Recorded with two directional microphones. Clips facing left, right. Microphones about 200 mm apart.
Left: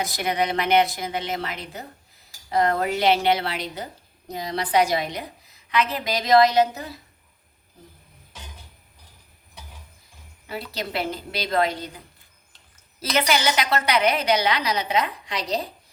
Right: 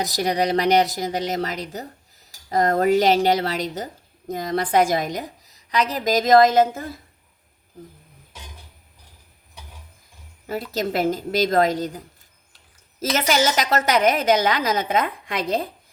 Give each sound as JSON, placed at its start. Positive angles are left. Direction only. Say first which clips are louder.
{"t": 0.0, "sound": "a woman's voice", "louder": "right 3 dB", "side_deg": -40}
{"t": 10.4, "sound": "a woman's voice", "louder": "right 6 dB", "side_deg": -45}